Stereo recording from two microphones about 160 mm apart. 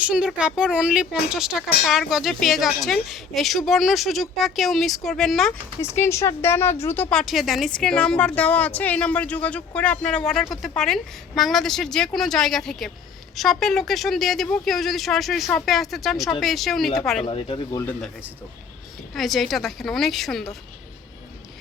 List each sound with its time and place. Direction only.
0.0 s speech: 5° right (ahead or behind)
5.9 s speech: 15° left (ahead or behind); by 17.0 s centre (ahead or behind)
17.2 s speech: 35° left (ahead or behind)
19.1 s speech: centre (ahead or behind)